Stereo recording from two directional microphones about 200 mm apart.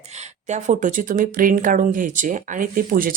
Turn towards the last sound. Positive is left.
turn(degrees=-45)  # may be behind; listen again after turning